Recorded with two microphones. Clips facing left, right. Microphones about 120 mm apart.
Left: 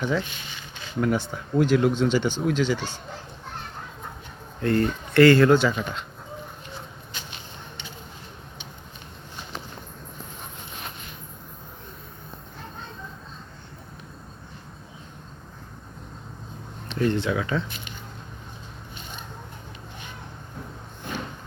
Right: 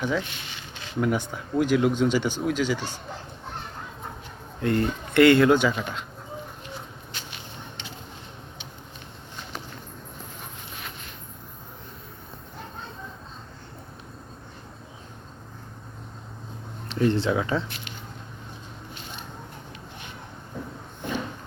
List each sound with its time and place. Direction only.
0.0 s speech: 10° right (ahead or behind)
4.6 s speech: 20° right (ahead or behind)
16.9 s speech: 25° right (ahead or behind)